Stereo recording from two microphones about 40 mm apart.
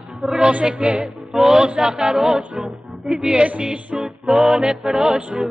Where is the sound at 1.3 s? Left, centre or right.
Centre.